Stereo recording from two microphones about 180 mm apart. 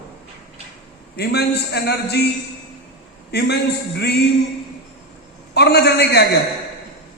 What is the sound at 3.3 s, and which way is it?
Speech, 65° left (ahead or behind).